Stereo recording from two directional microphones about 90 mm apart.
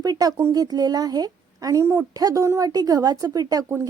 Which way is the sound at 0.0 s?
45° right (ahead or behind).